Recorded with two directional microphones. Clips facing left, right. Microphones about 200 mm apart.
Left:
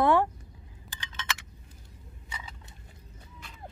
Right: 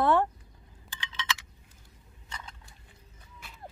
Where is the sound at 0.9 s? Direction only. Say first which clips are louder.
Right 2 dB; 45° left (ahead or behind).